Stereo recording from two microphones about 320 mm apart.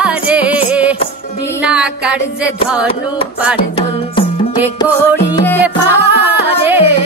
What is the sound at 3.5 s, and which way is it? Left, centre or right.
Music, centre.